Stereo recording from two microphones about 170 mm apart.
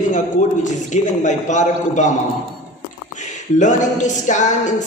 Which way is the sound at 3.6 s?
45° left (ahead or behind).